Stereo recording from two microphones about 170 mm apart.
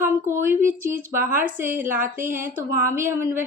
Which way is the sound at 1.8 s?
50° right (ahead or behind).